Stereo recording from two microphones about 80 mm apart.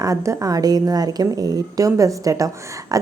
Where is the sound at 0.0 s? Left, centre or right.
Right.